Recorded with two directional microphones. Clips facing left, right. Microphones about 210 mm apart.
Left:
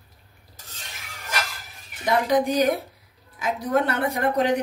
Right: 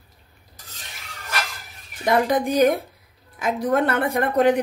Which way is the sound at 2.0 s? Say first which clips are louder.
Right 1 dB; 50° right (ahead or behind).